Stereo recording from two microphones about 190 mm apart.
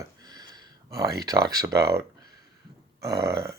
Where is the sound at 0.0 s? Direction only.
20° right (ahead or behind).